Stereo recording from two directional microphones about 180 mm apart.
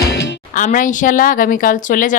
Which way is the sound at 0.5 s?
45° left (ahead or behind).